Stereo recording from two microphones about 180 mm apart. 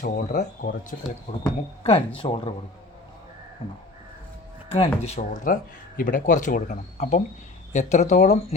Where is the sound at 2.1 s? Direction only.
30° left (ahead or behind).